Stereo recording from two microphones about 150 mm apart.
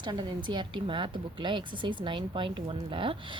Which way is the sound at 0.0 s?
30° right (ahead or behind).